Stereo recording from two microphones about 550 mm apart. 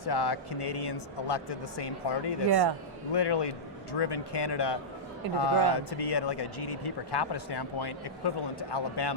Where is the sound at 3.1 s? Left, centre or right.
Left.